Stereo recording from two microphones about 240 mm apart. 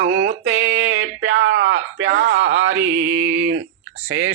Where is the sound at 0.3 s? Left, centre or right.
Right.